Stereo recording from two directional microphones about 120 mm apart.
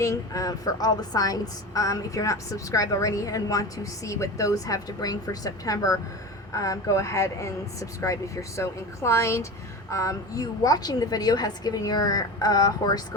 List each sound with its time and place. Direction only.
0.0 s a woman's voice: 30° left (ahead or behind)